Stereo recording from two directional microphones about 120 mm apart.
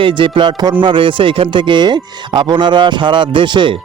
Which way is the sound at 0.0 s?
45° right (ahead or behind).